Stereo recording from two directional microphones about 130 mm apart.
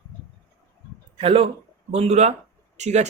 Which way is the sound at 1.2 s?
45° right (ahead or behind).